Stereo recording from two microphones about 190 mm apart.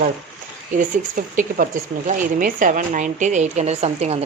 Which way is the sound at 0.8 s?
45° right (ahead or behind).